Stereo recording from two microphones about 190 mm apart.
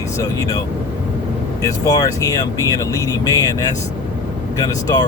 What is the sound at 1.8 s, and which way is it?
Speech, 20° left (ahead or behind).